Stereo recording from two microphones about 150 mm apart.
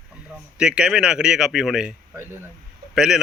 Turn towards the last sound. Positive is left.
turn(degrees=-5)  # may be behind; listen again after turning